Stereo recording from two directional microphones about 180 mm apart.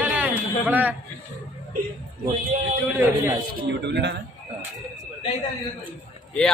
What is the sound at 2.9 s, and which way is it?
Speech, 10° right (ahead or behind).